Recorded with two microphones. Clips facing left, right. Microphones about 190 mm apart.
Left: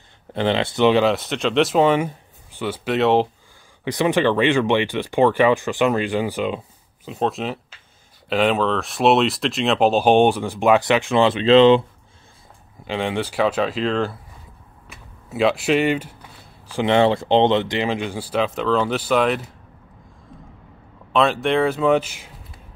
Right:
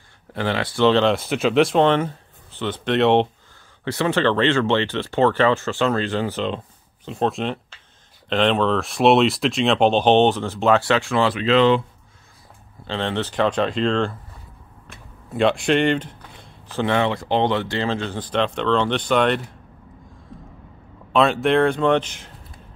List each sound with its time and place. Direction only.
0.3 s speech: 25° left (ahead or behind)
1.0 s speech: centre (ahead or behind)
3.8 s speech: 15° left (ahead or behind)
12.8 s speech: 10° left (ahead or behind)
14.9 s a sound: 5° left (ahead or behind)
16.9 s speech: 25° left (ahead or behind); by 19.5 s 5° left (ahead or behind)
21.1 s speech: centre (ahead or behind)